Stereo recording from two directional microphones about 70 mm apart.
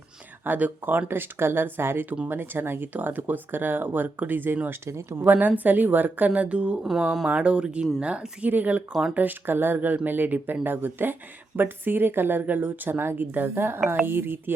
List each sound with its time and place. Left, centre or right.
0.4 s speech: right
4.9 s speech: right
5.2 s speech: right
8.9 s speech: centre
9.1 s speech: right